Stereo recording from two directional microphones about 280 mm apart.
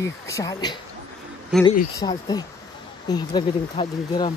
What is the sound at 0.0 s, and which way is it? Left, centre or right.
Speech, centre.